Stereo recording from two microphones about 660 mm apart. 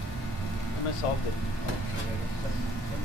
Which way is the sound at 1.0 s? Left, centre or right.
Left.